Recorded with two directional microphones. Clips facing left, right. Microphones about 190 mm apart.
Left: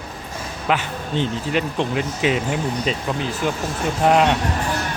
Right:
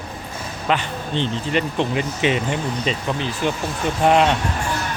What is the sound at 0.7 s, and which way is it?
Speech, 5° left (ahead or behind).